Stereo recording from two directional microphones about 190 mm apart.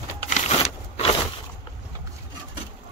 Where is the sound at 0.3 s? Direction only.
35° left (ahead or behind).